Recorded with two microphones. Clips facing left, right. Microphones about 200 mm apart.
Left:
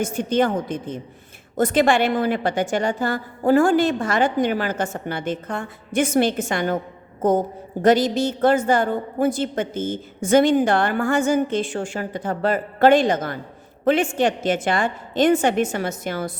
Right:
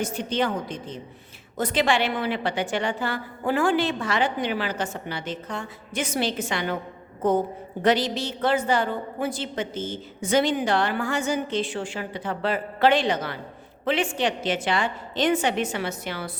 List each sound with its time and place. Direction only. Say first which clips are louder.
0.0 s a woman's voice: left 5 dB; 50° left (ahead or behind)